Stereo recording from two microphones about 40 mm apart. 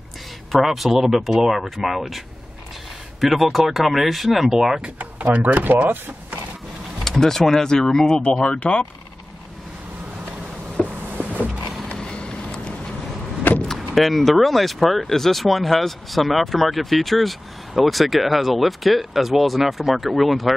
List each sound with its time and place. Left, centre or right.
0.5 s speech: centre
5.4 s speech: right
7.1 s speech: centre
8.2 s speech: left
10.8 s a sound: centre
11.2 s vehicle: left
11.9 s vehicle: left
13.7 s speech: centre